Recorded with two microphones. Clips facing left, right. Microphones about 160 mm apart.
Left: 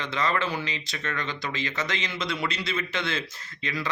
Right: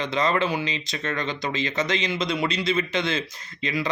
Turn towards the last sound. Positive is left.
turn(degrees=-20)  # may be behind; listen again after turning